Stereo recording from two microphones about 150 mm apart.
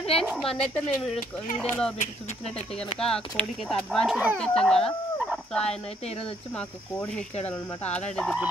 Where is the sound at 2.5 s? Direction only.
5° left (ahead or behind).